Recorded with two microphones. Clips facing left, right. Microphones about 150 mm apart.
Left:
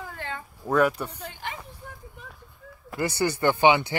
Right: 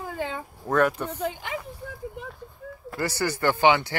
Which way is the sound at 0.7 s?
10° left (ahead or behind).